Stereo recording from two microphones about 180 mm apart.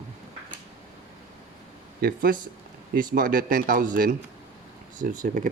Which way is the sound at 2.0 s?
55° right (ahead or behind).